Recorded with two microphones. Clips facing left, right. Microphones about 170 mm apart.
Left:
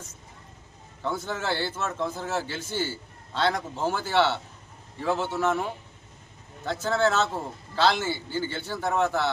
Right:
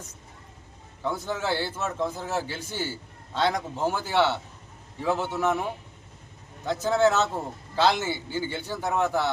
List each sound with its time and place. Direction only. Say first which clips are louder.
1.0 s a man's voice: right 1 dB; 10° right (ahead or behind)
6.7 s a man's voice: right 3 dB; 15° right (ahead or behind)